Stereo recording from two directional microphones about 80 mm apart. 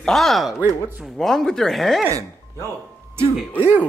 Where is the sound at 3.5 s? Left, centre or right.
Centre.